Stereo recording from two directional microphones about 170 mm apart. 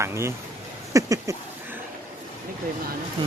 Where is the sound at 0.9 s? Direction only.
20° right (ahead or behind).